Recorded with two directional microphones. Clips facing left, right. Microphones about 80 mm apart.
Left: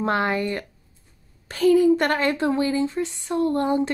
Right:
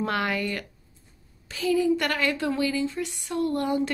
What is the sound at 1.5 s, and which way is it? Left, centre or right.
Speech, left.